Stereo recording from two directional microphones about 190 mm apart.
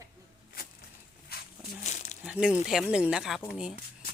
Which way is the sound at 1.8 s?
35° left (ahead or behind).